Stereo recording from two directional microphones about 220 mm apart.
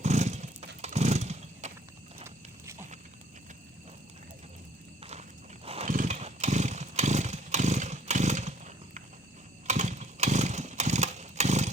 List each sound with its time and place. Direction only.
0.0 s a sound: 30° right (ahead or behind)
0.8 s motorcycle: 30° right (ahead or behind)
5.6 s chainsaw: 30° right (ahead or behind)